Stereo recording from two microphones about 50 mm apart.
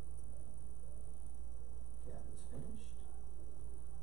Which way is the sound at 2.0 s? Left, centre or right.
Centre.